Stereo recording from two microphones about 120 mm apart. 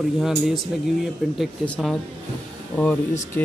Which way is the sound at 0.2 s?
5° right (ahead or behind).